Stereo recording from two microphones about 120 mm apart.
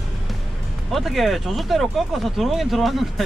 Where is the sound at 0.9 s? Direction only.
Centre (ahead or behind).